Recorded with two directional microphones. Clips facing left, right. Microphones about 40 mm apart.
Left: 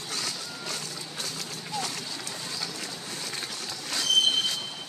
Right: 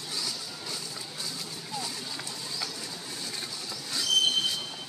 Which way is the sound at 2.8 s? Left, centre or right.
Left.